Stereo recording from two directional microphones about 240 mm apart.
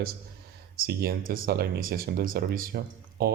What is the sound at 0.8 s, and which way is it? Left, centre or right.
Speech, right.